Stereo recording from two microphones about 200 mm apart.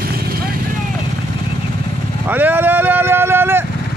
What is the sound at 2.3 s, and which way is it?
Vehicle, 10° right (ahead or behind).